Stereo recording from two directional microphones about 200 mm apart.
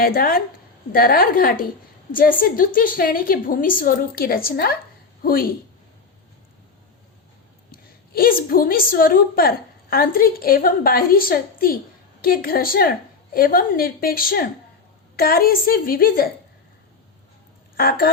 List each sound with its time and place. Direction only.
0.0 s a woman's voice: 45° left (ahead or behind)
7.7 s a woman's voice: 50° left (ahead or behind)
17.7 s a woman's voice: 50° left (ahead or behind)